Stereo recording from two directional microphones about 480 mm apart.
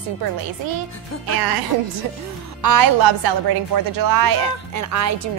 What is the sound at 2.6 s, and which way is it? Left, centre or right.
A woman's voice, right.